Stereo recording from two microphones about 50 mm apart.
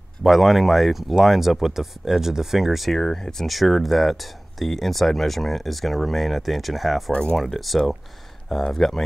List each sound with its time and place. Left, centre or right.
0.2 s speech: centre
2.9 s speech: centre
7.1 s speech: left
7.3 s speech: centre